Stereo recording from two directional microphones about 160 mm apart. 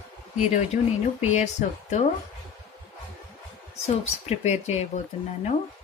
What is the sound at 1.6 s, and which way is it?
Speech, 50° left (ahead or behind).